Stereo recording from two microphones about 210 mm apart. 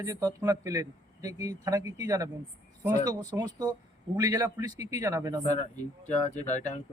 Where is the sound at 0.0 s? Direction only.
15° right (ahead or behind).